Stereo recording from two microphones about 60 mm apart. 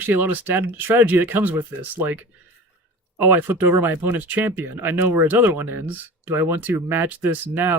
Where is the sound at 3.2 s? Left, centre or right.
Right.